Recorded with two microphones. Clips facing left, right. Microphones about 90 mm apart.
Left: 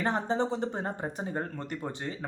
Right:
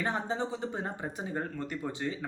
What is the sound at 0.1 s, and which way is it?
Speech, 45° left (ahead or behind).